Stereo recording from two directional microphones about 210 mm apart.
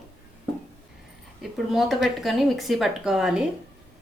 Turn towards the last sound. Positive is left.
turn(degrees=-5)  # may be behind; listen again after turning